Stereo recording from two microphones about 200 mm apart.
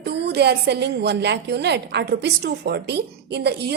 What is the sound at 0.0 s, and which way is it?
A woman's voice, 55° right (ahead or behind).